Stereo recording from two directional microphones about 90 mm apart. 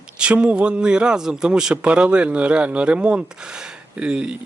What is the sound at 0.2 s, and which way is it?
Speech, 10° right (ahead or behind).